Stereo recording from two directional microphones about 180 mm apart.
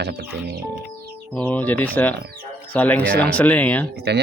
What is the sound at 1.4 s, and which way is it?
Speech, 10° left (ahead or behind).